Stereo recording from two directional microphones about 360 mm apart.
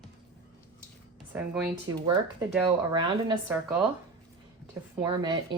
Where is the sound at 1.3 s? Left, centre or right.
Centre.